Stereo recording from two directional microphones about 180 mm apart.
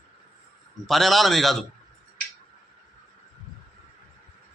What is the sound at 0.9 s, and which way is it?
Speech, centre (ahead or behind).